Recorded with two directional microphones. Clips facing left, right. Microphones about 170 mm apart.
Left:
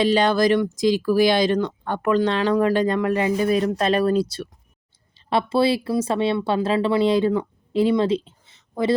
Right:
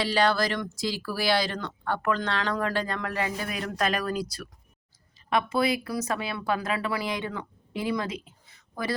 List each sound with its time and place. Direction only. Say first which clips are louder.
0.0 s speech: left 7 dB; 20° left (ahead or behind)